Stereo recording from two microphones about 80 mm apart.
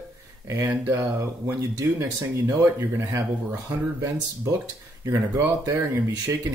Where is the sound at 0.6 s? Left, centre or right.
Right.